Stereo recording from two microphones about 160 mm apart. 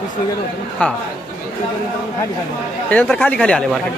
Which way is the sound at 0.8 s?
10° left (ahead or behind).